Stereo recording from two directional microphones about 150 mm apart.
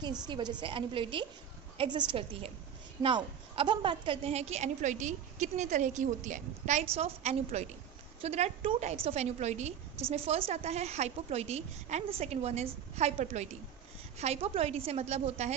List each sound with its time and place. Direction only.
0.0 s a woman's voice: 30° right (ahead or behind); by 15.5 s 50° right (ahead or behind)